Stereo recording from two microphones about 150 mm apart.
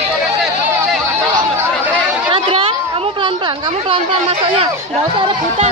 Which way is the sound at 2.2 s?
35° right (ahead or behind).